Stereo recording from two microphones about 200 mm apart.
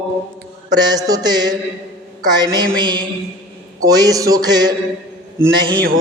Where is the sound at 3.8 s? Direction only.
20° right (ahead or behind).